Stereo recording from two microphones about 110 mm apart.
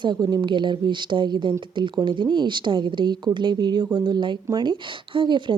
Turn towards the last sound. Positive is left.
turn(degrees=-45)  # may be behind; listen again after turning